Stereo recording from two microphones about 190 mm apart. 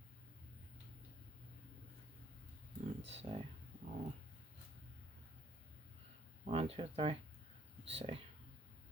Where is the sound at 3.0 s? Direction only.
30° right (ahead or behind).